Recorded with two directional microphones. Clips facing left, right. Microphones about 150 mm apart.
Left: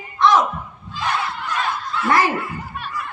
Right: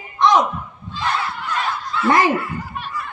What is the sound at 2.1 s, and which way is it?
Speech, 20° right (ahead or behind).